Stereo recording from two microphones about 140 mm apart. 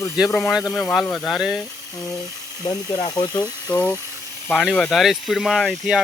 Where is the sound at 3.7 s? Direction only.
15° left (ahead or behind).